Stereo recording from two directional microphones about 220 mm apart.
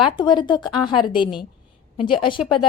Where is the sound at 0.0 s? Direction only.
20° left (ahead or behind).